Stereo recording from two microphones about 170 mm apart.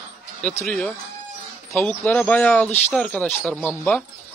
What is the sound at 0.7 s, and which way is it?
Speech, 5° left (ahead or behind).